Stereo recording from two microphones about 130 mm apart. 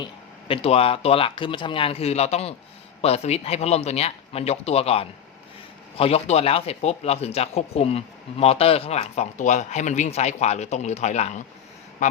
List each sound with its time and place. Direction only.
0.0 s speech: 45° left (ahead or behind); by 11.4 s 65° left (ahead or behind)